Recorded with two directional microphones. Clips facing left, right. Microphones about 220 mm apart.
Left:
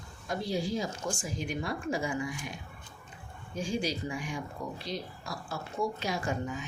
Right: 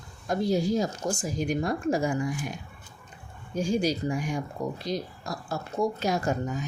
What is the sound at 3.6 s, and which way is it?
Speech, 40° right (ahead or behind).